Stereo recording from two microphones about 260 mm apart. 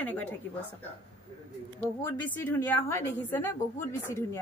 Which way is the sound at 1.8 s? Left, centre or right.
Centre.